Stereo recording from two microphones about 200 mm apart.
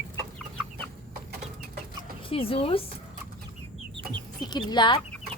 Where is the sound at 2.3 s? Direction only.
30° left (ahead or behind).